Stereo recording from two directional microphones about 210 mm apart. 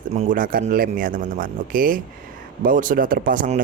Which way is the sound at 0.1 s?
35° right (ahead or behind).